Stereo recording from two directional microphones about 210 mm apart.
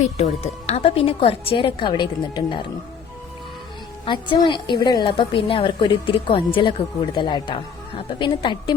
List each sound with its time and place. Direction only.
0.2 s a woman's voice: 30° left (ahead or behind)
4.0 s a woman's voice: 25° left (ahead or behind)